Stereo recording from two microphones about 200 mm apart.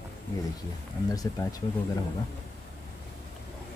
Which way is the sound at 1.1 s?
20° left (ahead or behind).